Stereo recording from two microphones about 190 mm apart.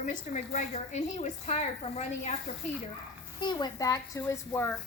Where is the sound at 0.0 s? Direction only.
40° left (ahead or behind).